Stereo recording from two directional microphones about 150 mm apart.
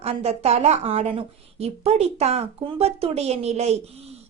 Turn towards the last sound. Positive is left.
turn(degrees=-45)  # may be behind; listen again after turning